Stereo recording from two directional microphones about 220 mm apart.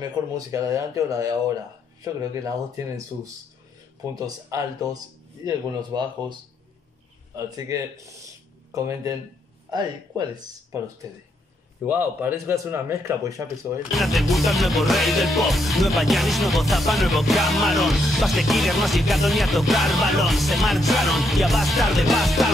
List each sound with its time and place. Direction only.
0.0 s speech: 15° right (ahead or behind)
4.1 s speech: 15° right (ahead or behind)
13.9 s music: centre (ahead or behind)